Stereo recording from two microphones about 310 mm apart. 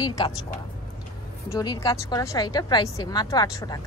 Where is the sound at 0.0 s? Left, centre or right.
Centre.